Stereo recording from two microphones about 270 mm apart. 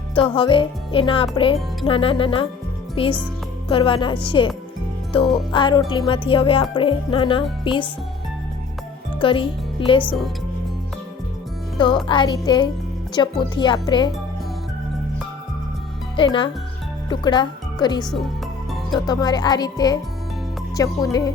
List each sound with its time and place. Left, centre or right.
0.1 s speech: centre
9.2 s speech: centre
12.0 s speech: centre
16.1 s speech: centre